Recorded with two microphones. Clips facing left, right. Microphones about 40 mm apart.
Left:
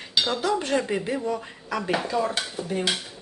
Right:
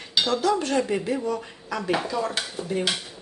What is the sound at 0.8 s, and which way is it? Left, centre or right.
Speech, centre.